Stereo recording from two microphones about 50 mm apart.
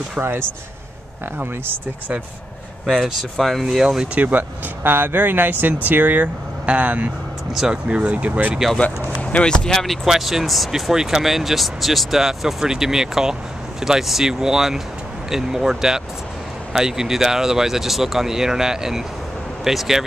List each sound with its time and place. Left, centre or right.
0.2 s speech: right
2.9 s speech: centre
3.6 s speech: centre
4.1 s speech: right
9.2 s a sound: left
9.5 s speech: centre
9.8 s speech: centre